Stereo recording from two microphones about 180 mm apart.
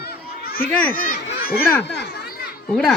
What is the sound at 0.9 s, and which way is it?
Speech, 50° left (ahead or behind).